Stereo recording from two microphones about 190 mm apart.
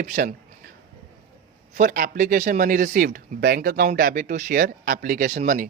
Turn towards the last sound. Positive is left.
turn(degrees=-45)  # may be behind; listen again after turning